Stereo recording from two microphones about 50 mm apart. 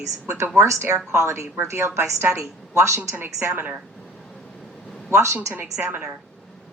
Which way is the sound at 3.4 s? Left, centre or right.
Right.